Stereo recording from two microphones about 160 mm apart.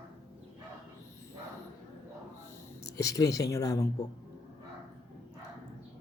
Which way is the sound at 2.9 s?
20° left (ahead or behind).